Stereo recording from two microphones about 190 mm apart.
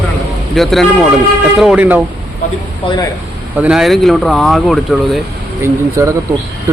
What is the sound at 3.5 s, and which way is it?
Speech, 5° right (ahead or behind).